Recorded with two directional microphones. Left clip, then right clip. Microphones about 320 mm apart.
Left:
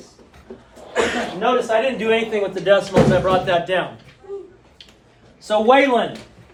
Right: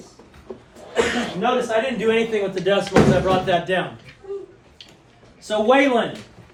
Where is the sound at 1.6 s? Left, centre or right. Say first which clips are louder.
Left 2 dB; left.